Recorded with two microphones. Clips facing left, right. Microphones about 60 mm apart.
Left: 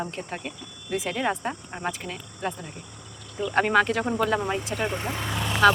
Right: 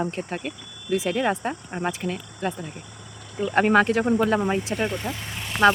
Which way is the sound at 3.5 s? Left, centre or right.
Right.